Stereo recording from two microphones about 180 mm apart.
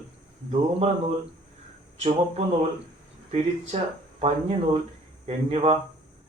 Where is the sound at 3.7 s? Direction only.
35° right (ahead or behind).